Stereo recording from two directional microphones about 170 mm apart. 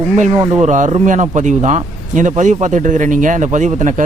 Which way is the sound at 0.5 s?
45° right (ahead or behind).